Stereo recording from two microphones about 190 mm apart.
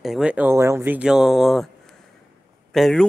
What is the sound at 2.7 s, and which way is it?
Speech, centre (ahead or behind).